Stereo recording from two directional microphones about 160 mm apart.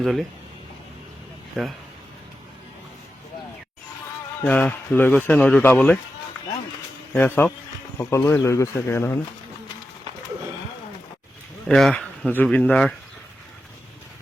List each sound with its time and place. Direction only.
0.0 s speech: centre (ahead or behind)
4.4 s speech: 10° left (ahead or behind)
7.1 s speech: 10° left (ahead or behind)
11.7 s speech: 5° left (ahead or behind)